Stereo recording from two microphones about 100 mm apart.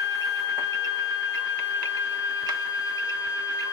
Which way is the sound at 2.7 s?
35° left (ahead or behind).